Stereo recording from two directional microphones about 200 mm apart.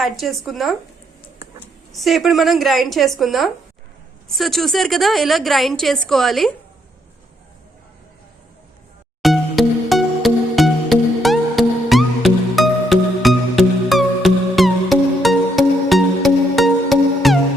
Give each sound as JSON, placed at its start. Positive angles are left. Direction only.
{"t": 0.0, "sound": "a woman's voice", "side_deg": 0}
{"t": 1.9, "sound": "a woman's voice", "side_deg": 0}
{"t": 9.2, "sound": "music", "side_deg": 0}